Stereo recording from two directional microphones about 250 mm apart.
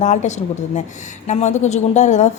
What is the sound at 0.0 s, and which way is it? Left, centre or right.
A woman's voice, left.